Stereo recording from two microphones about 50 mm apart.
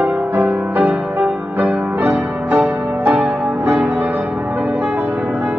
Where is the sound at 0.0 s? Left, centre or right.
Right.